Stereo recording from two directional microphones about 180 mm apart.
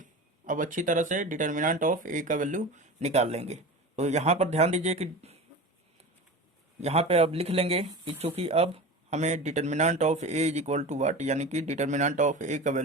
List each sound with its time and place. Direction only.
0.0 s speech: 45° right (ahead or behind)
6.8 s speech: 35° right (ahead or behind)